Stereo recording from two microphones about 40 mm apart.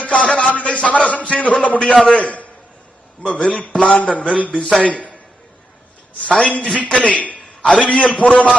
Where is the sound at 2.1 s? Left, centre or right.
Left.